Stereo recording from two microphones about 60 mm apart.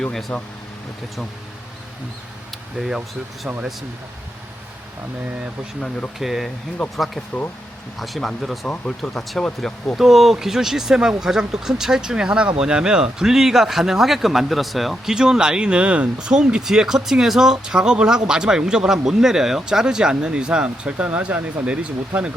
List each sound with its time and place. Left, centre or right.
0.0 s speech: centre
6.1 s speech: centre
8.6 s speech: left
8.9 s speech: centre
15.1 s speech: centre